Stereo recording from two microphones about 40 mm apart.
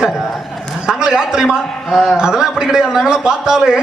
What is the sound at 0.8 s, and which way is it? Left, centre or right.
A man's voice, centre.